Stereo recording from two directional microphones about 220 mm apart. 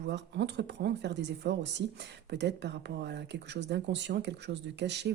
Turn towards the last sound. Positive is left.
turn(degrees=-50)  # may be behind; listen again after turning